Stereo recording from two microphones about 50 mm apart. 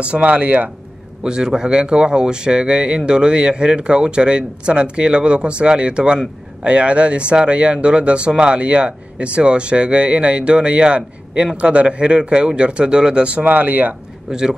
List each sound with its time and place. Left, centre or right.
0.0 s a man's voice: right
1.2 s a man's voice: centre
13.5 s speech: right
14.3 s a man's voice: centre